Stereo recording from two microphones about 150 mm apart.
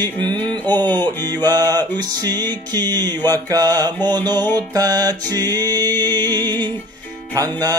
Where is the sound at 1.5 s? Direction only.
25° right (ahead or behind).